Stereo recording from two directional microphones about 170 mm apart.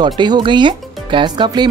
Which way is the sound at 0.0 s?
25° right (ahead or behind).